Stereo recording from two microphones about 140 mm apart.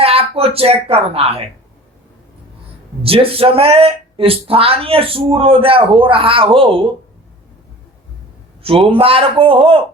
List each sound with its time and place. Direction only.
0.0 s speech: 45° right (ahead or behind)
3.0 s speech: 40° right (ahead or behind)
8.9 s speech: 40° right (ahead or behind)